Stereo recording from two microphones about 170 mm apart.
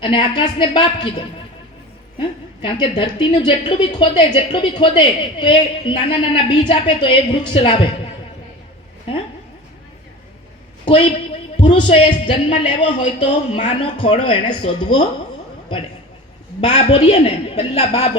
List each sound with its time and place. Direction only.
0.0 s a woman's voice: 30° left (ahead or behind)
2.1 s a woman's voice: 30° left (ahead or behind)
9.1 s a sound: 35° left (ahead or behind)
10.8 s a woman's voice: 30° left (ahead or behind)
16.6 s a man's voice: 40° left (ahead or behind)